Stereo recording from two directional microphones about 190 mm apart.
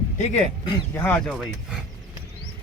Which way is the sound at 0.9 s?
10° left (ahead or behind).